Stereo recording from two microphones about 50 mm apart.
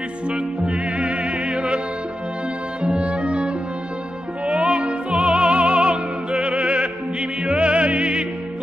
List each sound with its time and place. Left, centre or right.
0.3 s music: right
2.8 s music: centre